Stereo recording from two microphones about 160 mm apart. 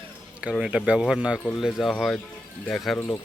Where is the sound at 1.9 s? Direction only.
5° left (ahead or behind).